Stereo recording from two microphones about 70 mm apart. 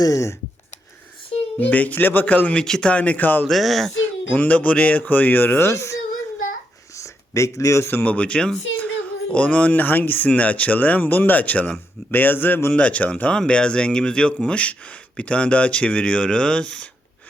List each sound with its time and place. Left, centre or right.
0.0 s speech: left
1.5 s speech: left
2.6 s speech: centre; by 3.4 s left
3.5 s speech: centre
4.3 s speech: left
5.7 s speech: left
6.9 s a sound: left
8.0 s speech: left